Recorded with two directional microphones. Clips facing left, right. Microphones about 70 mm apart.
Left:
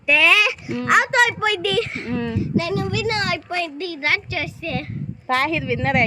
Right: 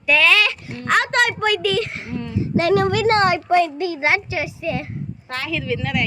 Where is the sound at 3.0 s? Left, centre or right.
Right.